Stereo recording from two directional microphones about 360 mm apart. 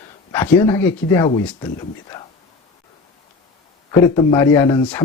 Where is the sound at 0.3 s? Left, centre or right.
Centre.